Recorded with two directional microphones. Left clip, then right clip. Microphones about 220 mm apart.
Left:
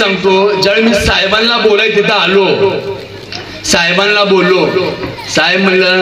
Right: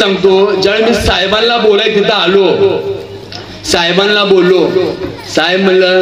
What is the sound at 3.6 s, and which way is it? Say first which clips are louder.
Speech: even; 50° right (ahead or behind).